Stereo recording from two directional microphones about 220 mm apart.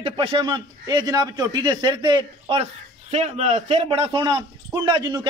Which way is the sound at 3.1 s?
30° right (ahead or behind).